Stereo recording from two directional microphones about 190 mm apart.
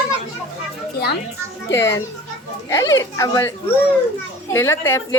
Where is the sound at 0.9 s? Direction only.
55° left (ahead or behind).